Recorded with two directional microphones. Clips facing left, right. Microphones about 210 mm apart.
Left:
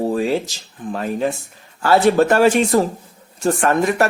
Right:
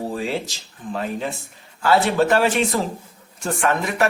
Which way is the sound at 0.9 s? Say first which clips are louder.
Left 5 dB; 45° left (ahead or behind).